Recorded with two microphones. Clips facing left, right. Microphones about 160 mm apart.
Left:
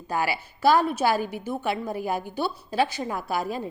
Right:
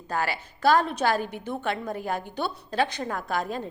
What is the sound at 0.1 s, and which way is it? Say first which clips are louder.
A woman's voice: left 2 dB; 10° left (ahead or behind).